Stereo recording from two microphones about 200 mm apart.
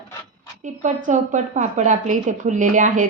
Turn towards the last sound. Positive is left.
turn(degrees=-40)  # may be behind; listen again after turning